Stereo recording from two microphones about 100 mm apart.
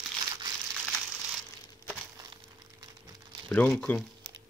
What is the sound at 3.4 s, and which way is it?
Speech, 15° left (ahead or behind).